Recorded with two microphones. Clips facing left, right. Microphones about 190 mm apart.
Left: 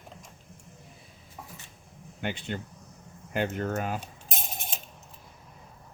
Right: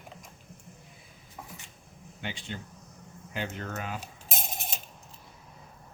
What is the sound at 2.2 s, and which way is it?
Speech, 60° left (ahead or behind).